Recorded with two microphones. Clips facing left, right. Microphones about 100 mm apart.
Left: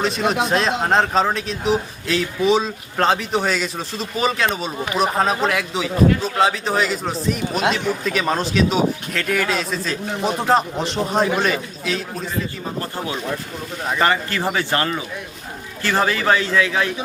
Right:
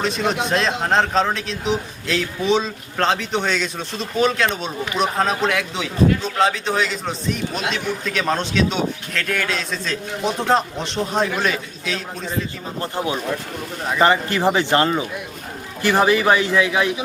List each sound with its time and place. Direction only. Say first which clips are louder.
0.0 s a man's voice: left 2 dB; centre (ahead or behind)
12.8 s a man's voice: right 5 dB; 20° right (ahead or behind)